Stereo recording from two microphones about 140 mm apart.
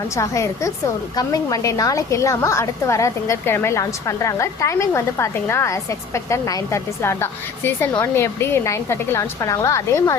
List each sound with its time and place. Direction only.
0.2 s a woman's voice: 20° left (ahead or behind)